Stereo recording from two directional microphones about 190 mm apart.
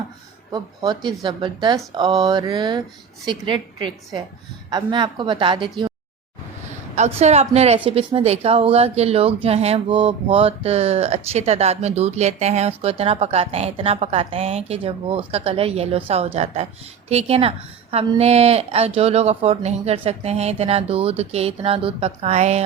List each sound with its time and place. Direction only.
0.5 s speech: 25° right (ahead or behind)
6.9 s a woman's voice: 35° right (ahead or behind)